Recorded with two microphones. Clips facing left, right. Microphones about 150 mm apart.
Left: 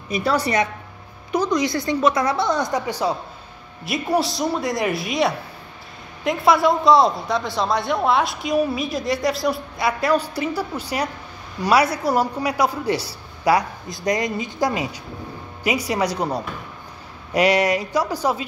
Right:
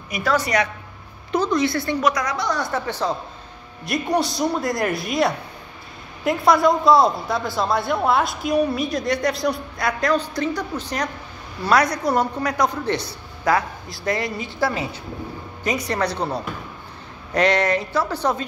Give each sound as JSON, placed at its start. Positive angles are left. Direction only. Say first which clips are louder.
{"t": 0.1, "sound": "a woman's voice", "louder": "left 1 dB", "side_deg": 30}
{"t": 1.3, "sound": "a woman's voice", "louder": "even", "side_deg": 15}